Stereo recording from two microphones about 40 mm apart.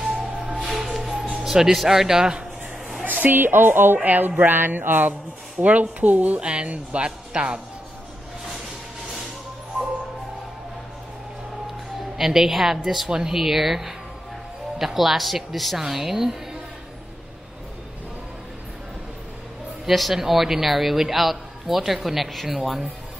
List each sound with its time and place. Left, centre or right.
0.0 s music: centre
1.4 s speech: centre
3.1 s a woman's voice: right
4.0 s speech: right
4.4 s a woman's voice: right
5.6 s speech: right
6.4 s speech: right
12.2 s a man's voice: centre
19.9 s a man's voice: centre